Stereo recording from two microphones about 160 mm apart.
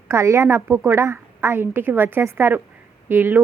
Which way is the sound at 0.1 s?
20° right (ahead or behind).